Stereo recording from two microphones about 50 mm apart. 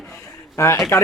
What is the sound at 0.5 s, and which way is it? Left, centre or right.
Speech, left.